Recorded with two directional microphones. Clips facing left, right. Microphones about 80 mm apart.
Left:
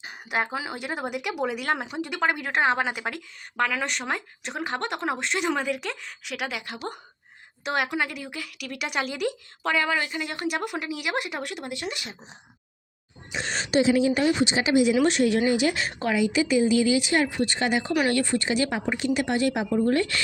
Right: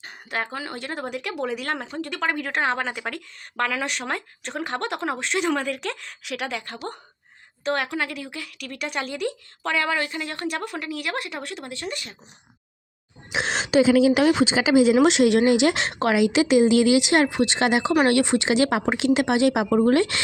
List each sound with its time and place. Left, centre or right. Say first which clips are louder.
0.0 s speech: left 2 dB; centre
13.3 s a woman's voice: right 4 dB; right
18.1 s speech: right 4 dB; right